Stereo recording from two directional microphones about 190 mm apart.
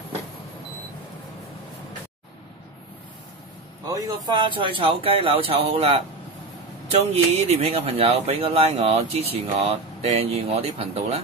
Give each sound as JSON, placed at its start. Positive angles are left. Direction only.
{"t": 3.8, "sound": "a man's voice", "side_deg": -20}